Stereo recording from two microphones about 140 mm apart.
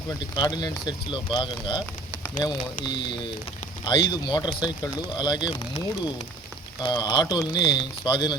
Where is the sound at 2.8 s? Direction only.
30° left (ahead or behind).